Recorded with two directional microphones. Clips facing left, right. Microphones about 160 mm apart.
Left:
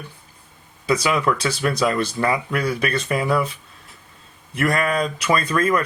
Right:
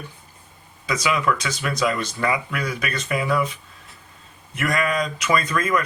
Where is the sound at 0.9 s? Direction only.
30° left (ahead or behind).